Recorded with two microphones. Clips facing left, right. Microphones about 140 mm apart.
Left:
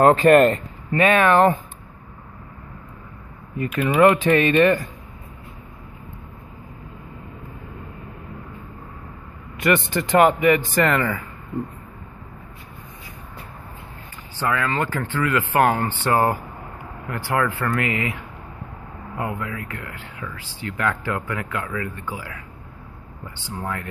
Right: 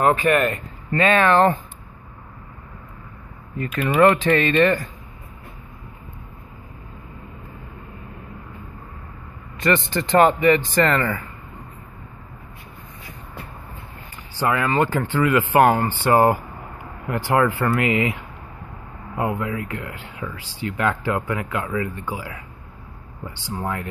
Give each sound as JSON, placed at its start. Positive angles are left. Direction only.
{"t": 0.0, "sound": "speech", "side_deg": 40}
{"t": 0.9, "sound": "speech", "side_deg": 15}
{"t": 3.5, "sound": "speech", "side_deg": 10}
{"t": 9.6, "sound": "speech", "side_deg": 10}
{"t": 14.4, "sound": "speech", "side_deg": -15}
{"t": 19.1, "sound": "speech", "side_deg": -15}